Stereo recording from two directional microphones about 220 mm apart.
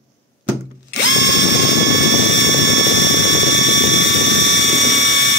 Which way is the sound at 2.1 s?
55° left (ahead or behind).